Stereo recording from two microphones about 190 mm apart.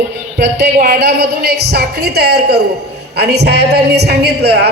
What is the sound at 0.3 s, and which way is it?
A man's voice, 60° right (ahead or behind).